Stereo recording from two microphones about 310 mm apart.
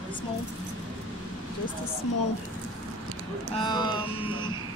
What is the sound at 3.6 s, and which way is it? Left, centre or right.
Speech, centre.